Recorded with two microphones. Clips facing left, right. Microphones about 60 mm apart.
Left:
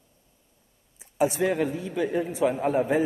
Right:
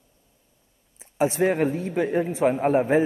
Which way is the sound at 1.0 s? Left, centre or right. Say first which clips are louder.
Right 2 dB; right.